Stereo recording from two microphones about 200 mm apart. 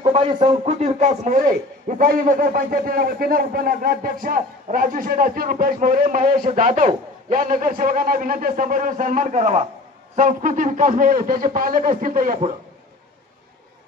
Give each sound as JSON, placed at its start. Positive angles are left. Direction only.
{"t": 0.0, "sound": "a man's voice", "side_deg": -25}